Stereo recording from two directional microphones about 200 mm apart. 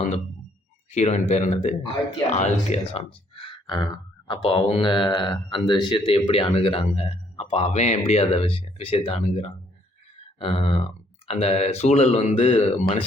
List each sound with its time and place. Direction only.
0.9 s speech: 35° left (ahead or behind)